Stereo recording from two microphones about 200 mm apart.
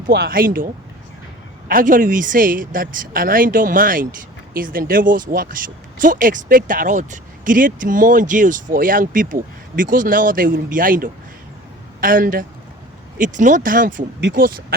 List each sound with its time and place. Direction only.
0.1 s speech: 50° right (ahead or behind)